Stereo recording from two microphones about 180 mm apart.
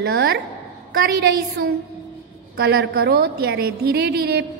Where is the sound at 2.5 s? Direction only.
65° right (ahead or behind).